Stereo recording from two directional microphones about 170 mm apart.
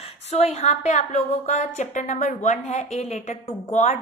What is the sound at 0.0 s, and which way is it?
A woman's voice, 40° left (ahead or behind).